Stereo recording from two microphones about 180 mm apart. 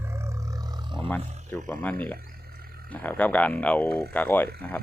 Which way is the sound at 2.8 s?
10° left (ahead or behind).